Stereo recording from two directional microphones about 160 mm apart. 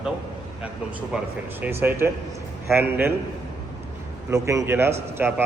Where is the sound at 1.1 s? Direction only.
5° right (ahead or behind).